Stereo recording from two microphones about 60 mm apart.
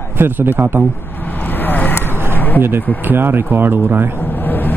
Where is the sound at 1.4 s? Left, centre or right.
Left.